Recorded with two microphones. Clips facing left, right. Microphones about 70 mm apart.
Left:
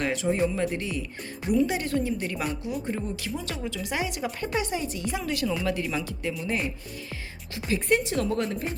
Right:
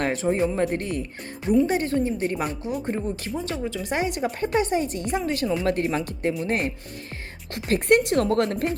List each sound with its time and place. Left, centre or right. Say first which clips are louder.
0.0 s music: right 3 dB; right
0.3 s speech: right 2 dB; right
0.6 s speech: right 4 dB; right
3.3 s speech: right 4 dB; right
3.8 s speech: right 5 dB; right
5.6 s speech: right 5 dB; right